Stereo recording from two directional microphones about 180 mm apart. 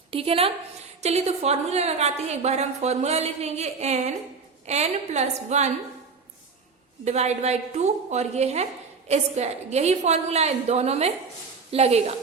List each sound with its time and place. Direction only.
0.1 s a woman's voice: 30° right (ahead or behind)
7.0 s a woman's voice: 40° right (ahead or behind)